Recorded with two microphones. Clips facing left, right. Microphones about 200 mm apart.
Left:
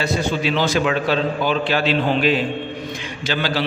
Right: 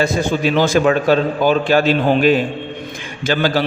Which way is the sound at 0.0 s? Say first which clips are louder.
Right 4 dB; 50° right (ahead or behind).